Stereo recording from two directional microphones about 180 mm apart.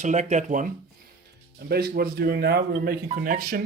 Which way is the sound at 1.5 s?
60° right (ahead or behind).